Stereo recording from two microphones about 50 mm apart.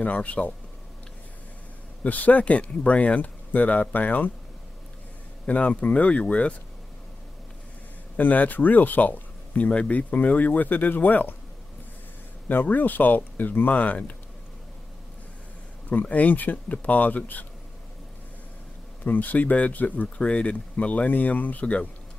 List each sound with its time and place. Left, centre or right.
0.0 s speech: left
2.0 s speech: left
5.5 s speech: left
8.2 s speech: left
12.4 s speech: left
15.9 s speech: left
19.0 s speech: left